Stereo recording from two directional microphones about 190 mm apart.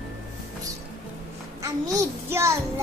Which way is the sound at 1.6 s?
15° right (ahead or behind).